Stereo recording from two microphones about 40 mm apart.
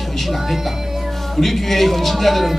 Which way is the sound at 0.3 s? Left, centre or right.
Centre.